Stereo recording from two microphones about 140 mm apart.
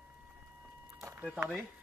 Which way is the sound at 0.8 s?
20° right (ahead or behind).